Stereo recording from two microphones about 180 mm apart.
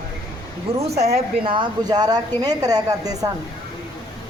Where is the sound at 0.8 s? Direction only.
35° right (ahead or behind); by 3.2 s 20° right (ahead or behind).